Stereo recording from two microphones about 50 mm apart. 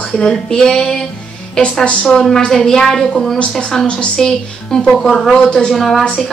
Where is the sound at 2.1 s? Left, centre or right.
Centre.